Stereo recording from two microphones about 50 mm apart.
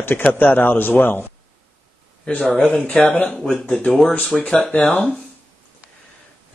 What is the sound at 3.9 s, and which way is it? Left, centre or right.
Speech, centre.